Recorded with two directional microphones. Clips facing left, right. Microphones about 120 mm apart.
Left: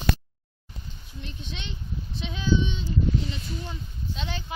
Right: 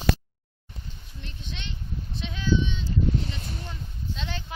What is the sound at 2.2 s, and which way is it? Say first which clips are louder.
Child singing: left 1 dB; 20° left (ahead or behind).